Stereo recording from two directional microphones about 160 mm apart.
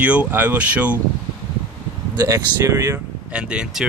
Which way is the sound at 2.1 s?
20° right (ahead or behind).